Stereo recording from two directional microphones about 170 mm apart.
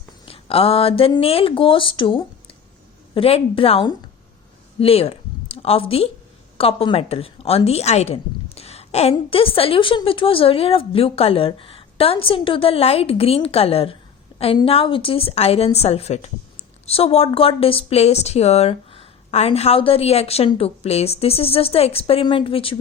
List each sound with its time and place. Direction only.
0.3 s a woman's voice: 35° left (ahead or behind)